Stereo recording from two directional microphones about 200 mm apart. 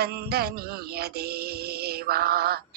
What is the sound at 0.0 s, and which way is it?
Music, 50° right (ahead or behind).